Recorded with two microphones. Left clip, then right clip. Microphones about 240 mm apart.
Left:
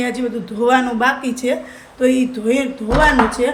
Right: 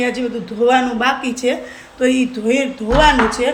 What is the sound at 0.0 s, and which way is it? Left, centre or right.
Speech, centre.